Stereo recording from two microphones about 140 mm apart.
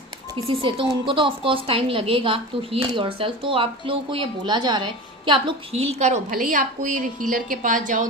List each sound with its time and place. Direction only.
0.7 s a woman's voice: 35° right (ahead or behind)
5.7 s a woman's voice: 50° right (ahead or behind)
6.3 s a woman's voice: 65° right (ahead or behind)